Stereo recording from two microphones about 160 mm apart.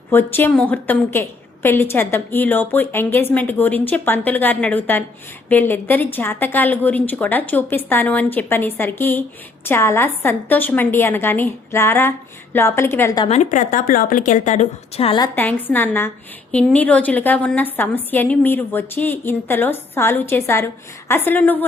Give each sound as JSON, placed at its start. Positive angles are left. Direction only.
{"t": 0.1, "sound": "a woman's voice", "side_deg": 15}
{"t": 13.2, "sound": "a woman's voice", "side_deg": 45}
{"t": 15.4, "sound": "a woman's voice", "side_deg": 10}